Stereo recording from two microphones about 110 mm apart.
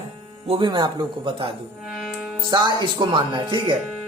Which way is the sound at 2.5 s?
45° right (ahead or behind).